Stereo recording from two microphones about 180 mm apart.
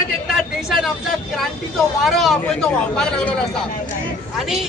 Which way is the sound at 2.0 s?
Centre (ahead or behind).